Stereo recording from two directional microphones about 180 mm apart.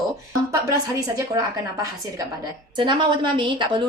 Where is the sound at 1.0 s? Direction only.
20° right (ahead or behind).